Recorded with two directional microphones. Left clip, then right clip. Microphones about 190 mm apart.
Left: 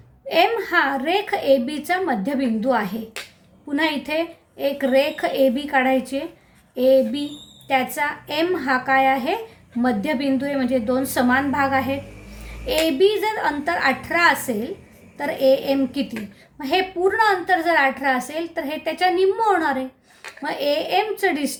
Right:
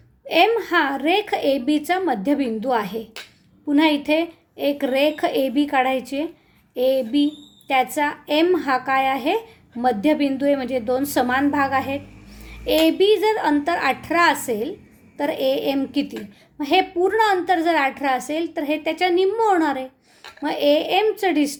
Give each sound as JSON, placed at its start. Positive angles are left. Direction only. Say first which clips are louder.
{"t": 0.3, "sound": "a woman's voice", "louder": "right 1 dB", "side_deg": -35}